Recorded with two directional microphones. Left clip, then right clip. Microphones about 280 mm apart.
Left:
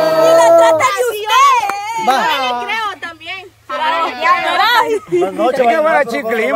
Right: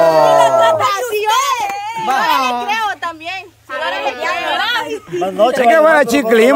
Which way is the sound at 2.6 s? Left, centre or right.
Centre.